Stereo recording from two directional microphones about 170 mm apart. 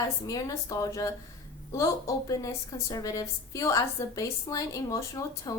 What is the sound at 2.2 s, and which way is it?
A woman's voice, 20° left (ahead or behind).